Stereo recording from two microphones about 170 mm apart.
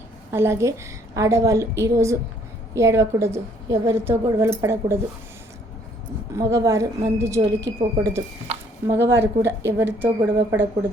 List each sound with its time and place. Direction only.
0.3 s a woman's voice: 15° right (ahead or behind)
6.3 s a woman's voice: 20° right (ahead or behind)